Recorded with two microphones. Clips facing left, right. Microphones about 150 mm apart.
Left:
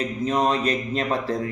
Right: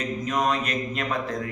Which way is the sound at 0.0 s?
30° left (ahead or behind).